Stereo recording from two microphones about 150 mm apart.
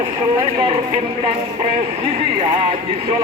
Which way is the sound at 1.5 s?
40° right (ahead or behind).